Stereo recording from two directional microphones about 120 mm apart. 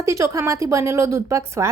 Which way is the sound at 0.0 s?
25° right (ahead or behind).